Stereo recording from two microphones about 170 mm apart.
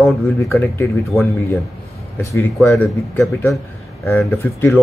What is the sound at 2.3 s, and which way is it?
Speech, 15° left (ahead or behind).